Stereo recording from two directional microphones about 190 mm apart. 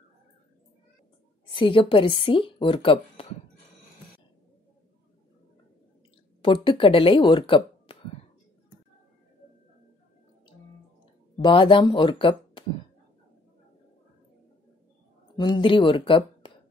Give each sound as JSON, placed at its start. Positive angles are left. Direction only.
{"t": 1.5, "sound": "a woman's voice", "side_deg": 25}
{"t": 6.4, "sound": "speech", "side_deg": 25}
{"t": 11.4, "sound": "a woman's voice", "side_deg": 25}
{"t": 15.3, "sound": "speech", "side_deg": 25}